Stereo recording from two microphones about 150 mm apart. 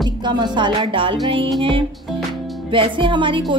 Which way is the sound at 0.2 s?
30° right (ahead or behind).